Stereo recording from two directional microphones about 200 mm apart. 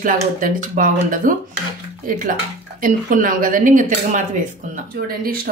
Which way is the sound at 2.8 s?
45° right (ahead or behind).